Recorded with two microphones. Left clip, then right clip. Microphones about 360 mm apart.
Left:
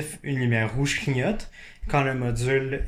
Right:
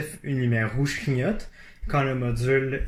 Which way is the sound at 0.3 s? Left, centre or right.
Left.